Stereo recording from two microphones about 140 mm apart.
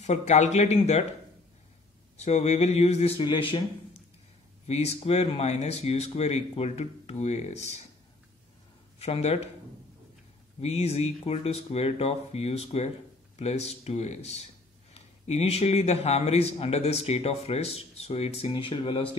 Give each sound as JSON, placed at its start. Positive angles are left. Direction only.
{"t": 0.0, "sound": "a man's voice", "side_deg": 55}
{"t": 2.1, "sound": "a man's voice", "side_deg": 50}
{"t": 4.6, "sound": "a man's voice", "side_deg": 50}
{"t": 9.0, "sound": "a man's voice", "side_deg": 45}
{"t": 10.6, "sound": "a man's voice", "side_deg": 50}
{"t": 18.5, "sound": "speech", "side_deg": 35}